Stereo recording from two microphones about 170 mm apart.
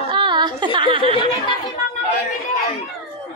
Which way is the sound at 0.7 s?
30° right (ahead or behind).